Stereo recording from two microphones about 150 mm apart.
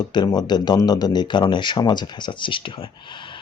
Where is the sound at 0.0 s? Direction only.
30° left (ahead or behind).